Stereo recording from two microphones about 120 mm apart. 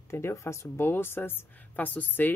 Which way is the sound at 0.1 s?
25° left (ahead or behind).